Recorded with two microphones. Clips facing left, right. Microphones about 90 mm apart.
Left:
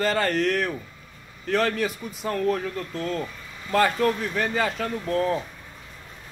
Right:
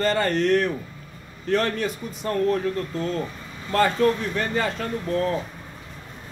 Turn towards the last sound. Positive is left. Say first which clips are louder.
# even
turn(degrees=0)  # may be behind; listen again after turning